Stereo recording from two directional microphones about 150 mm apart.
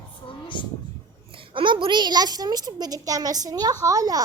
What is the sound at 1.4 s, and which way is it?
A woman's voice, 35° right (ahead or behind).